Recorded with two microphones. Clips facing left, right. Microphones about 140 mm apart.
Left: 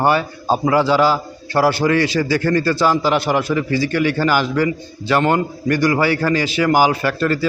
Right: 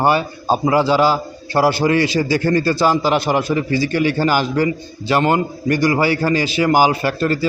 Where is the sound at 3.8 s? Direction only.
40° right (ahead or behind).